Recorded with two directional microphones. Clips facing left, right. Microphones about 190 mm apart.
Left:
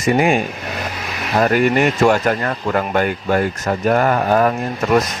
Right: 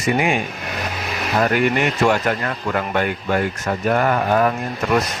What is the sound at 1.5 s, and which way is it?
Speech, 40° left (ahead or behind).